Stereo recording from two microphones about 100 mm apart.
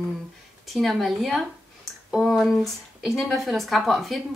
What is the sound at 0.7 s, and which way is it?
A woman's voice, centre (ahead or behind).